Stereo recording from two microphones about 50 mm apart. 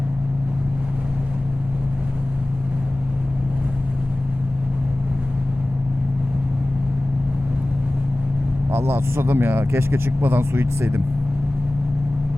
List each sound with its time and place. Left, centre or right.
8.7 s speech: right